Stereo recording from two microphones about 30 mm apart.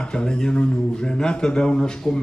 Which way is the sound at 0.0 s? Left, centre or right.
Left.